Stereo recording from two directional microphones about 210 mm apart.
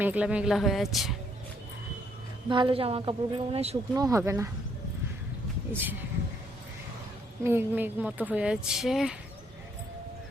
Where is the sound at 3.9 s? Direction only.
15° right (ahead or behind).